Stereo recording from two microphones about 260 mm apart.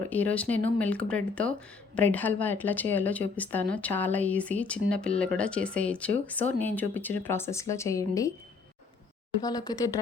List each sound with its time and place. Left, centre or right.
0.1 s a woman's voice: centre
9.4 s a woman's voice: centre